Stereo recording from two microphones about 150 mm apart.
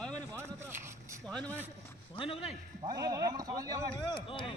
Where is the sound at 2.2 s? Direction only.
40° left (ahead or behind).